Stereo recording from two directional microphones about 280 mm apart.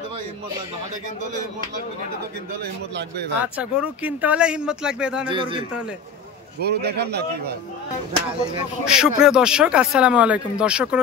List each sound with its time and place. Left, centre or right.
2.6 s a man's voice: right
3.5 s speech: centre
5.3 s a man's voice: centre
6.6 s a man's voice: right
8.8 s speech: centre